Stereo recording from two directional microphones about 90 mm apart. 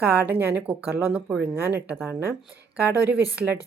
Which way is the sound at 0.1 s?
20° right (ahead or behind).